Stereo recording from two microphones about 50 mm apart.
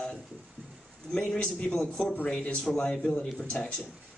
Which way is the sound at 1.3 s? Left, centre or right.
Left.